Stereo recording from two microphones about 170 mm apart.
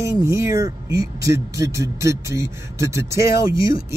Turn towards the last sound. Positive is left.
turn(degrees=-20)  # may be behind; listen again after turning